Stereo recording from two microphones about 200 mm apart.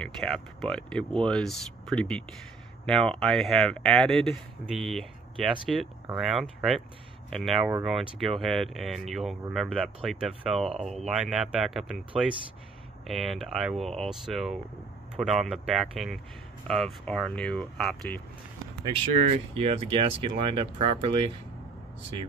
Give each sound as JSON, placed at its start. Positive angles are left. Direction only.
{"t": 0.0, "sound": "speech", "side_deg": 0}
{"t": 18.8, "sound": "speech", "side_deg": -30}